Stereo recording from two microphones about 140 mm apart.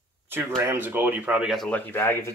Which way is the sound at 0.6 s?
15° right (ahead or behind).